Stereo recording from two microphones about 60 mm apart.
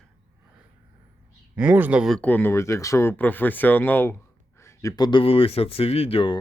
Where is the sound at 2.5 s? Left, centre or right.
Left.